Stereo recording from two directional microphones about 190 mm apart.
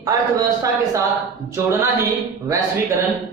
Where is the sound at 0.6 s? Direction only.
20° right (ahead or behind).